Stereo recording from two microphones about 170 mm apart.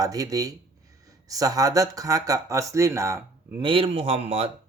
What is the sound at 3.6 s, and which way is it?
Speech, 30° right (ahead or behind).